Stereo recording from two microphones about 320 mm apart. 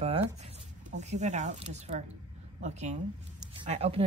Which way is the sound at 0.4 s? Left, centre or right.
Right.